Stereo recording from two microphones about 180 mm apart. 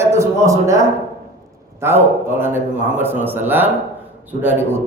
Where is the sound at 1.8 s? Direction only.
15° right (ahead or behind).